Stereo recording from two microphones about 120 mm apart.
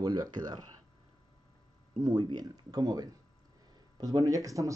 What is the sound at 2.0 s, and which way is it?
Speech, 40° right (ahead or behind).